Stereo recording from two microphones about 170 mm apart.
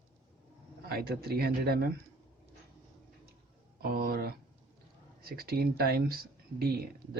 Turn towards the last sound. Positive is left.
turn(degrees=-65)  # may be behind; listen again after turning